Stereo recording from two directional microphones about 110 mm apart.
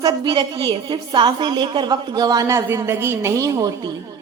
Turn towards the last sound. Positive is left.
turn(degrees=-30)  # may be behind; listen again after turning